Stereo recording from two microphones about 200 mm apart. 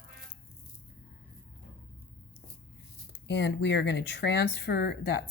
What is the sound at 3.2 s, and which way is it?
Speech, 60° left (ahead or behind).